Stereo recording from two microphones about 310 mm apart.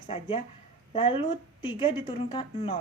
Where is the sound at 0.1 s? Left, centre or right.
Centre.